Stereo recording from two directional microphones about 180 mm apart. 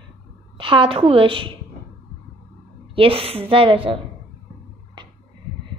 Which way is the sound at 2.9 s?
30° right (ahead or behind).